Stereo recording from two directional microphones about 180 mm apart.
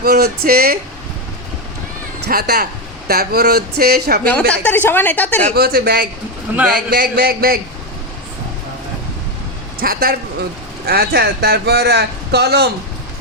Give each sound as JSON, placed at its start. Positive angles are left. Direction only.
{"t": 0.0, "sound": "speech", "side_deg": -60}
{"t": 2.2, "sound": "speech", "side_deg": -65}
{"t": 4.3, "sound": "speech", "side_deg": 10}
{"t": 5.5, "sound": "speech", "side_deg": -55}
{"t": 9.8, "sound": "speech", "side_deg": -55}